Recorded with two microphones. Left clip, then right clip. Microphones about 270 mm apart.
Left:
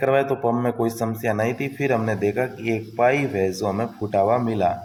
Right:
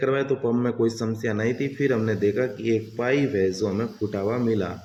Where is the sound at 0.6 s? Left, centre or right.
Left.